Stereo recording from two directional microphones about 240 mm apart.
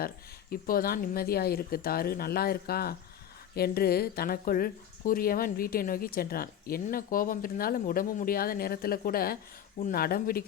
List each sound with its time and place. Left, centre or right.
0.5 s speech: left